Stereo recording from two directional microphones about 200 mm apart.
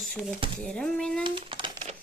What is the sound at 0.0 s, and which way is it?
Speech, centre (ahead or behind).